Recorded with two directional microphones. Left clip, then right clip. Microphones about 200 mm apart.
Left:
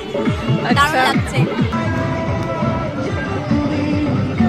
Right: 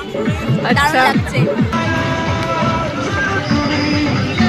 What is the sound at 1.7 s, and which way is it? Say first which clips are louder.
Music: right 3 dB; 40° right (ahead or behind).